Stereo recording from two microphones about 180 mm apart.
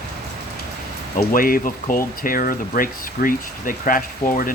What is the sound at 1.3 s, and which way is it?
Speech, 50° left (ahead or behind).